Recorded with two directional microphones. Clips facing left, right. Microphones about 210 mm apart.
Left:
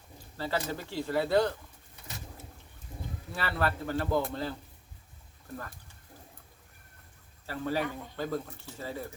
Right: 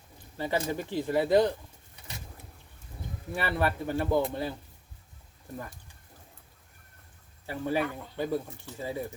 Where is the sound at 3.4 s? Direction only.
15° right (ahead or behind).